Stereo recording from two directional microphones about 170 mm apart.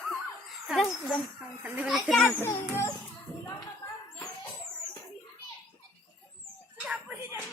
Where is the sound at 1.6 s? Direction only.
5° right (ahead or behind).